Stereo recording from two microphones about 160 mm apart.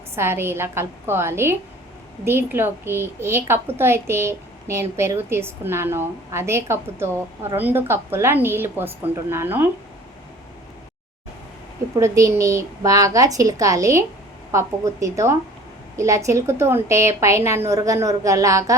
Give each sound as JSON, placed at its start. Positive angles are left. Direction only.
{"t": 0.2, "sound": "a child's voice", "side_deg": -15}
{"t": 11.9, "sound": "a woman's voice", "side_deg": -20}